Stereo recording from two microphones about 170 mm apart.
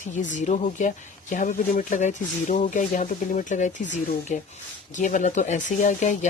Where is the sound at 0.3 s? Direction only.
45° left (ahead or behind).